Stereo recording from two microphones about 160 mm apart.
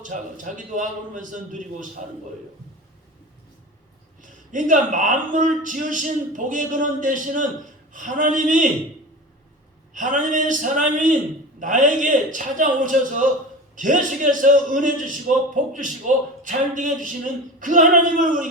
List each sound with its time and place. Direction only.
0.0 s a man's voice: 55° right (ahead or behind)
4.2 s a man's voice: 55° right (ahead or behind)
9.9 s a man's voice: 55° right (ahead or behind)